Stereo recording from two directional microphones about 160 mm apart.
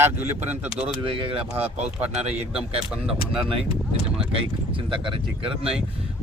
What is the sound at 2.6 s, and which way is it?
Speech, 5° right (ahead or behind).